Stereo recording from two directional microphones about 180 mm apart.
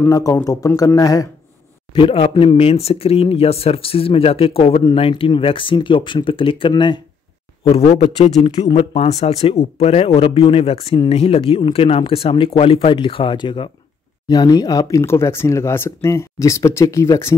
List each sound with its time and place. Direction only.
0.0 s speech: 20° left (ahead or behind)